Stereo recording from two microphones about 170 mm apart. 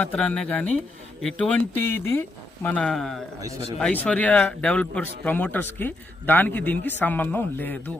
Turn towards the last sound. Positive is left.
turn(degrees=10)  # may be behind; listen again after turning